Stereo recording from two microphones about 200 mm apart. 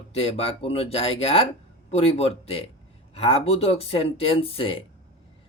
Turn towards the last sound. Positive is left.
turn(degrees=25)  # may be behind; listen again after turning